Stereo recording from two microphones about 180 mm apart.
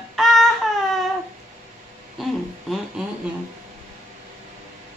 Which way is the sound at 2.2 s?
Centre (ahead or behind).